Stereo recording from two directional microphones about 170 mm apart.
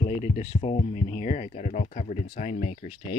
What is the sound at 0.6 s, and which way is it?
Speech, 35° left (ahead or behind).